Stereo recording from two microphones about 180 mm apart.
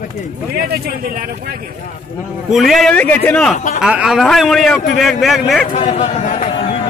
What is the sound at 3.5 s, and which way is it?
Speech, 45° left (ahead or behind).